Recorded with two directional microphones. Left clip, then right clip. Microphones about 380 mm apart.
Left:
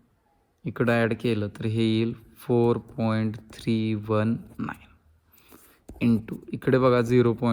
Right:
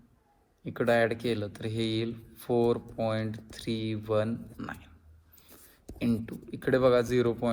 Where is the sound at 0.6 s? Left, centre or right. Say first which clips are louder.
Left 1 dB; left.